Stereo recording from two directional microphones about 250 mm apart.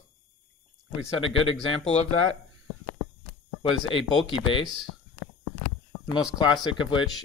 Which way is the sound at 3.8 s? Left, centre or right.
Left.